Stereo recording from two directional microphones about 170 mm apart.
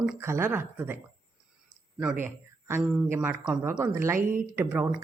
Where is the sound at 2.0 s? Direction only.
10° right (ahead or behind).